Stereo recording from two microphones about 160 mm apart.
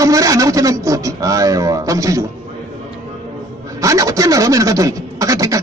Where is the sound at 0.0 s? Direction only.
20° right (ahead or behind).